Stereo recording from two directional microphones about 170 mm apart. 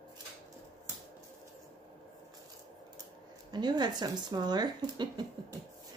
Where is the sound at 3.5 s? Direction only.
25° right (ahead or behind).